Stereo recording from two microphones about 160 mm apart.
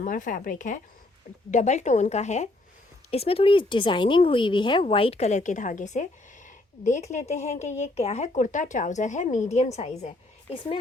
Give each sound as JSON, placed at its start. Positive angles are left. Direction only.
{"t": 0.0, "sound": "speech", "side_deg": 55}